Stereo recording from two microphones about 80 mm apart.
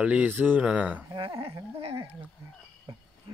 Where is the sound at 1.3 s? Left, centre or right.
Right.